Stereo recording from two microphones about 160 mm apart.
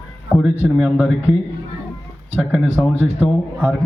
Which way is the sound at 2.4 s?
Centre (ahead or behind).